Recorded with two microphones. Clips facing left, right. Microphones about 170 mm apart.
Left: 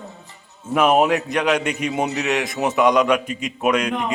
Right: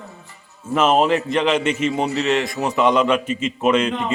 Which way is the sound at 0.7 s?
10° left (ahead or behind).